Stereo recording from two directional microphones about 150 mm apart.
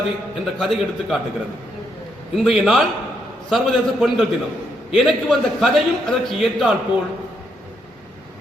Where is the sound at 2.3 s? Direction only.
Centre (ahead or behind).